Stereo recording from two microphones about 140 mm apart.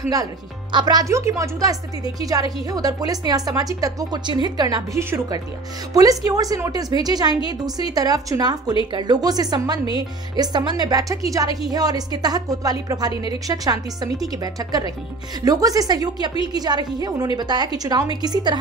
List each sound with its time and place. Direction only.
0.1 s a woman's voice: 30° right (ahead or behind)
13.1 s a woman's voice: 40° left (ahead or behind)
13.5 s a woman's voice: 25° right (ahead or behind)